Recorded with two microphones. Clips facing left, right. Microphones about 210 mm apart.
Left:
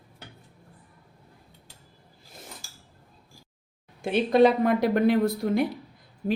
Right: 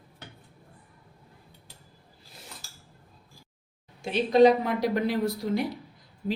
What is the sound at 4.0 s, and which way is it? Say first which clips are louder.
Speech: even; 55° left (ahead or behind).